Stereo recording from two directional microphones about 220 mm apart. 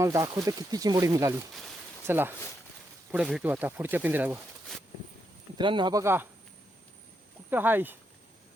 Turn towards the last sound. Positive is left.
turn(degrees=-10)  # may be behind; listen again after turning